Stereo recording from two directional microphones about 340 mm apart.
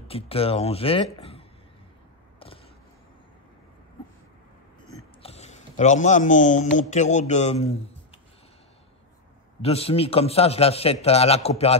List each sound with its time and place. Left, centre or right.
0.1 s a man's voice: centre
5.2 s a man's voice: centre
9.6 s a man's voice: centre